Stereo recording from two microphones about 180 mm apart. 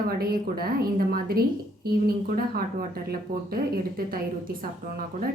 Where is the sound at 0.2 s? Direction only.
55° right (ahead or behind).